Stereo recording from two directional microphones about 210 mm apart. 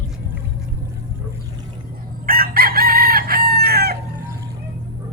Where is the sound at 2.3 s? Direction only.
45° right (ahead or behind).